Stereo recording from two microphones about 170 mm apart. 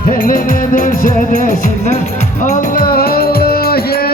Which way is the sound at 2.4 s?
60° left (ahead or behind).